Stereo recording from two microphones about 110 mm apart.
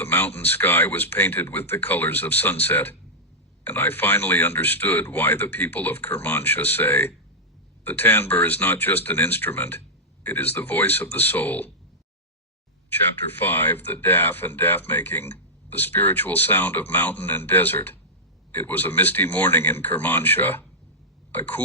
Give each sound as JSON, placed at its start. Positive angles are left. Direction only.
{"t": 0.0, "sound": "a sound", "side_deg": 15}
{"t": 0.3, "sound": "speech", "side_deg": 15}
{"t": 13.4, "sound": "speech", "side_deg": 15}